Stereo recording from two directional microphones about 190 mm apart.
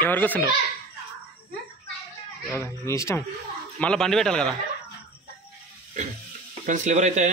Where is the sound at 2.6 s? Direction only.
15° left (ahead or behind).